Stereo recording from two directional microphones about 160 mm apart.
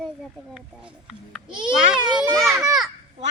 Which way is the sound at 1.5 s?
30° right (ahead or behind).